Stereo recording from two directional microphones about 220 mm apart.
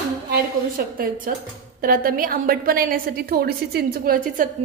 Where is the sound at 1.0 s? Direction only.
40° right (ahead or behind).